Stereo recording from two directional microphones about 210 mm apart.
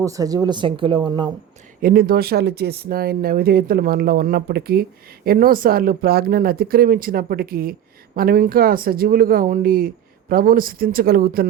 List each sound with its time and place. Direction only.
0.0 s speech: 15° right (ahead or behind)
1.8 s speech: 45° right (ahead or behind)